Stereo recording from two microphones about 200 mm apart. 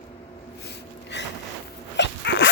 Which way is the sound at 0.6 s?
60° left (ahead or behind).